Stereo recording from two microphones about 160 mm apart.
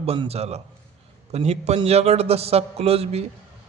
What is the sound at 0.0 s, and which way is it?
A man's voice, 40° right (ahead or behind).